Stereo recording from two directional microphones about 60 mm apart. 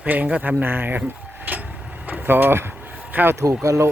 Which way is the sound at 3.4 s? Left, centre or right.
Right.